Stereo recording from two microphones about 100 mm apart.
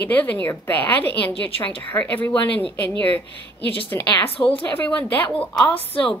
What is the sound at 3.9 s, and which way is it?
Speech, 30° left (ahead or behind).